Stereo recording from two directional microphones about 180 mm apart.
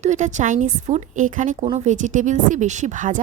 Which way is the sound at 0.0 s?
40° right (ahead or behind).